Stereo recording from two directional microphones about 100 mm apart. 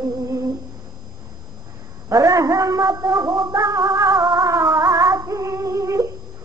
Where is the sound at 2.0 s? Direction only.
35° right (ahead or behind).